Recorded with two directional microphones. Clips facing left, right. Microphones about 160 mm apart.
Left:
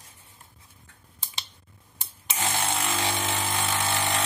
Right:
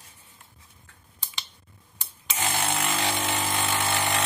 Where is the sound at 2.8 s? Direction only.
Centre (ahead or behind).